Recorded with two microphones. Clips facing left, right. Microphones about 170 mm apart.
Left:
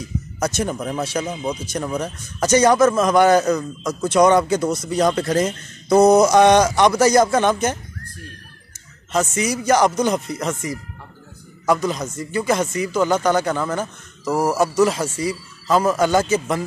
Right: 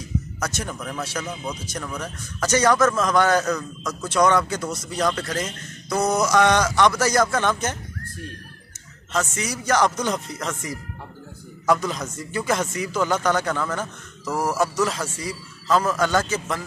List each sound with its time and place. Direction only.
0.4 s a man's voice: 20° left (ahead or behind)
3.4 s speech: 25° left (ahead or behind)
9.1 s a man's voice: 15° left (ahead or behind)
14.2 s speech: 25° left (ahead or behind)
14.8 s a man's voice: 10° left (ahead or behind)